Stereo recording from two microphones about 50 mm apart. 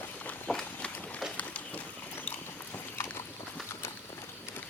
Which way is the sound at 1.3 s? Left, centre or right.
Left.